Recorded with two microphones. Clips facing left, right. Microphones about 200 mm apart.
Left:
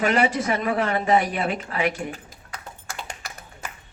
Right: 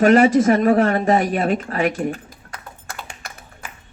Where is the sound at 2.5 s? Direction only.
55° right (ahead or behind).